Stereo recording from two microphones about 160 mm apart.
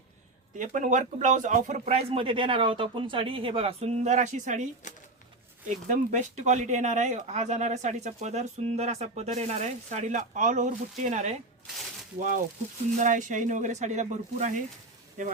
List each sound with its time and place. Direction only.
0.6 s speech: 50° right (ahead or behind)
13.0 s speech: 50° right (ahead or behind)